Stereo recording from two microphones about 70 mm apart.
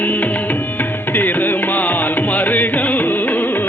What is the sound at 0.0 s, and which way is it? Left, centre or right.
Music, left.